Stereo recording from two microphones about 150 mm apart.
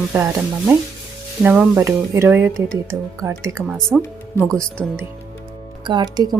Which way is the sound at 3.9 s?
5° right (ahead or behind).